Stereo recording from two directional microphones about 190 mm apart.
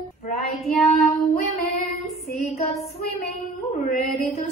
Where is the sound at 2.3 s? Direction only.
35° left (ahead or behind).